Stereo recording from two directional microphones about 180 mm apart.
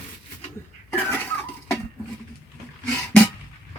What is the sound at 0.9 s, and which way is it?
Cough, 10° left (ahead or behind).